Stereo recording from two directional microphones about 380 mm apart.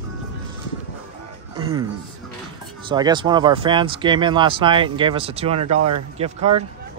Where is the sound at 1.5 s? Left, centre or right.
Centre.